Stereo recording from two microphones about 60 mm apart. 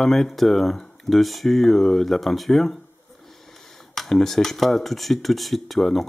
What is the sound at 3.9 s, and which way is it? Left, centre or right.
Speech, centre.